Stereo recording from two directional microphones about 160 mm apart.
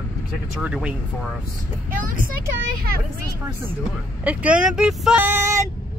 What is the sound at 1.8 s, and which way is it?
Speech, 60° right (ahead or behind).